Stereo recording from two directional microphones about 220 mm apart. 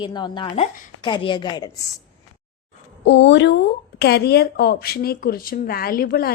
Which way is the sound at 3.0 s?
55° left (ahead or behind).